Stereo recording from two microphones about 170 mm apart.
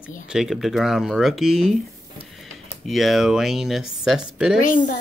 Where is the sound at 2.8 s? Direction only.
Centre (ahead or behind).